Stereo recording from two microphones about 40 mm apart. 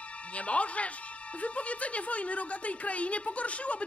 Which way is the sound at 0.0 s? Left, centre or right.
Left.